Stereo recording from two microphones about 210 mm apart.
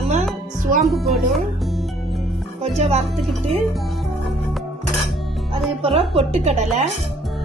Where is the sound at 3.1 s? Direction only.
Centre (ahead or behind).